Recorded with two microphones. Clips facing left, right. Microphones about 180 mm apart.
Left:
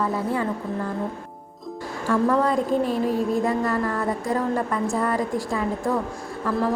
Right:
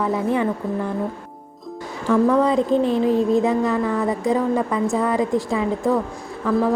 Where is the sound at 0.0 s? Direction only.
20° right (ahead or behind).